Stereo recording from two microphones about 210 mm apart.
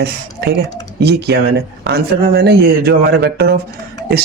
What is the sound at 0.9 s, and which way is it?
Speech, 50° right (ahead or behind).